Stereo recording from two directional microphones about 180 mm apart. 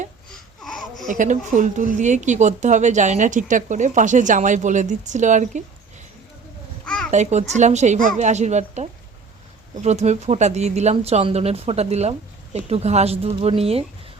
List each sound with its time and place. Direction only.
0.3 s baby cry: centre (ahead or behind)
1.0 s speech: 45° right (ahead or behind)
6.8 s babbling: 5° left (ahead or behind)
7.1 s speech: 40° right (ahead or behind)